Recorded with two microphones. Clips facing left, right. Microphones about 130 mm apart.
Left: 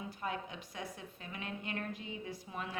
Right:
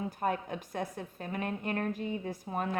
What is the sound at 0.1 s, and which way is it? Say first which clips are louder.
Speech: right 8 dB; 50° right (ahead or behind).